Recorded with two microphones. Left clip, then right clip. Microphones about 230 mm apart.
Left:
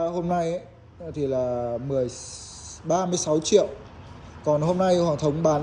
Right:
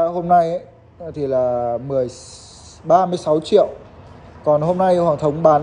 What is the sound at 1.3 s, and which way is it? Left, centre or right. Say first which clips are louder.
Speech: right 9 dB; centre.